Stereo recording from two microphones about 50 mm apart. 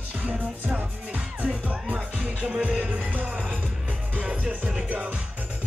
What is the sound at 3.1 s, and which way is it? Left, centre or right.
Music, right.